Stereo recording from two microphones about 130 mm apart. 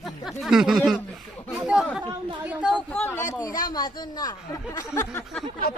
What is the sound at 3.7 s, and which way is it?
Speech, 30° left (ahead or behind).